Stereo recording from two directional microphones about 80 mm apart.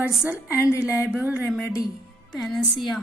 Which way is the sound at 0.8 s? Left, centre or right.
Centre.